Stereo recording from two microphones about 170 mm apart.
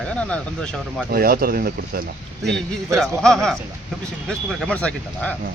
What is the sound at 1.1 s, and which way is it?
Speech, 60° right (ahead or behind).